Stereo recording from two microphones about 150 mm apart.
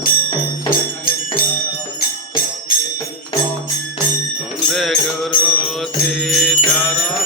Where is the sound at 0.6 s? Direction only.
70° left (ahead or behind).